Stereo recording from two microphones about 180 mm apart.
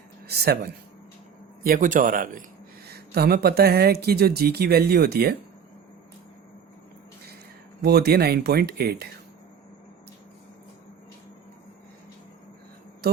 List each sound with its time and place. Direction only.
0.3 s speech: 60° right (ahead or behind)
1.6 s speech: 50° right (ahead or behind)
2.8 s speech: 60° right (ahead or behind)
7.8 s speech: 65° right (ahead or behind)